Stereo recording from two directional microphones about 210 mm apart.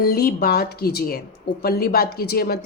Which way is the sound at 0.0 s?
45° left (ahead or behind).